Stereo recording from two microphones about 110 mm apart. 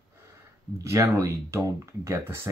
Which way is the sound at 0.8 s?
25° right (ahead or behind).